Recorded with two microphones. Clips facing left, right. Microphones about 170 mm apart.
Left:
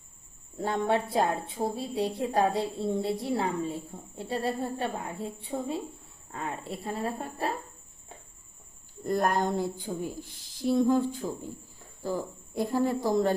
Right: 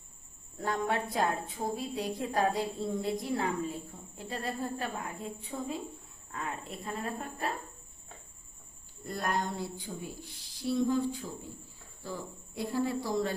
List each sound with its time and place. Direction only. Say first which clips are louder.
0.6 s a woman's voice: left 4 dB; 25° left (ahead or behind)
9.0 s a woman's voice: left 7 dB; 45° left (ahead or behind)